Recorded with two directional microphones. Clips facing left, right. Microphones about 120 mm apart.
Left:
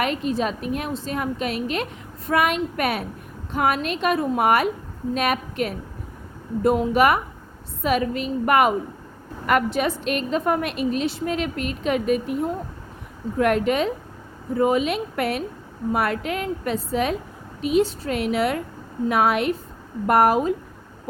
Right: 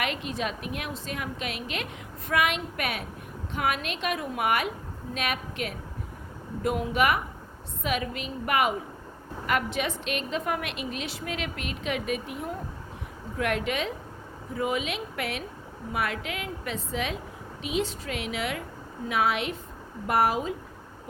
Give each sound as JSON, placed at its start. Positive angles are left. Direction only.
{"t": 0.0, "sound": "a woman's voice", "side_deg": 40}